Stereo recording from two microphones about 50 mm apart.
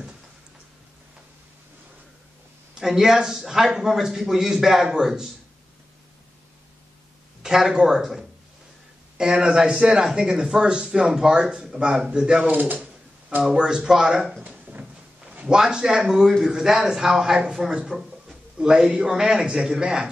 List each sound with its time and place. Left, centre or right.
2.7 s speech: centre
7.4 s speech: centre
12.4 s speech: right
13.4 s speech: centre
15.4 s speech: centre